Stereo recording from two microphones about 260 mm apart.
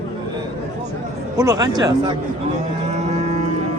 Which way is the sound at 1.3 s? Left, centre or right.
Centre.